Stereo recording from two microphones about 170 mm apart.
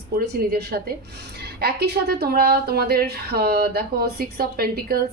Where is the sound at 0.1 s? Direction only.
65° right (ahead or behind).